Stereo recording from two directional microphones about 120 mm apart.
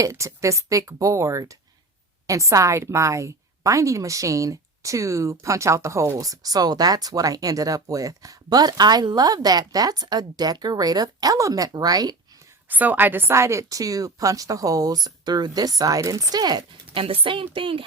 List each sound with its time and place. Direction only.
0.0 s a woman's voice: 25° right (ahead or behind)
12.6 s a woman's voice: 15° right (ahead or behind); by 17.0 s 35° right (ahead or behind)
17.0 s a woman's voice: 45° right (ahead or behind)